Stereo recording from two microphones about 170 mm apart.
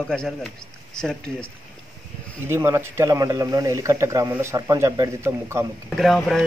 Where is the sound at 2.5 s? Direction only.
15° right (ahead or behind).